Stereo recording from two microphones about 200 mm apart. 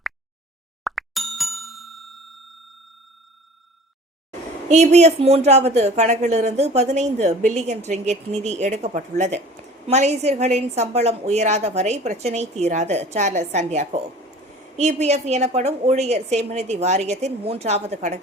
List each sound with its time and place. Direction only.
0.9 s plop: centre (ahead or behind)
4.7 s speech: 35° right (ahead or behind)